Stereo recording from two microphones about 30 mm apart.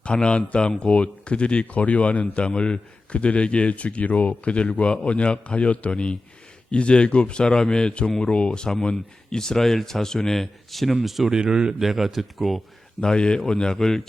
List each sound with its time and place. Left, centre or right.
0.0 s speech: left
1.8 s a man's voice: left
2.4 s a man's voice: left
6.7 s a man's voice: left; by 10.9 s centre
11.0 s speech: centre
11.4 s a man's voice: right
11.8 s speech: centre
13.0 s a man's voice: left